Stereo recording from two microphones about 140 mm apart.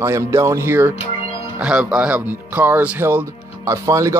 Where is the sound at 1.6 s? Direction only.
5° right (ahead or behind).